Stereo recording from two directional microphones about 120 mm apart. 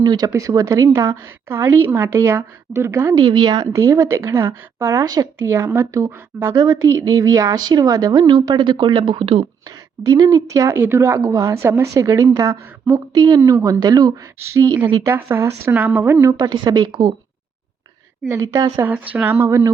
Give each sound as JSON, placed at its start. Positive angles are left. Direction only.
{"t": 0.0, "sound": "speech", "side_deg": -35}
{"t": 3.2, "sound": "speech", "side_deg": -35}
{"t": 9.6, "sound": "a woman's voice", "side_deg": -30}
{"t": 16.5, "sound": "a woman's voice", "side_deg": -30}
{"t": 18.3, "sound": "speech", "side_deg": -25}
{"t": 19.1, "sound": "speech", "side_deg": -15}